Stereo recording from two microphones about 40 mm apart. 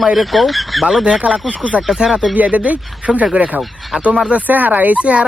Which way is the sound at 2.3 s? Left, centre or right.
Right.